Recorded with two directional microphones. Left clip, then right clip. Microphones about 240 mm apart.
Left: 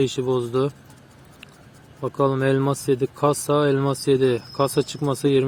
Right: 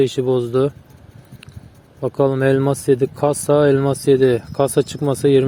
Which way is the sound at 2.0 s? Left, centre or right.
Centre.